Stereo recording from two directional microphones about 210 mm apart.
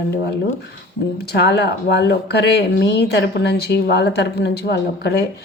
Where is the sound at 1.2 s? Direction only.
55° left (ahead or behind).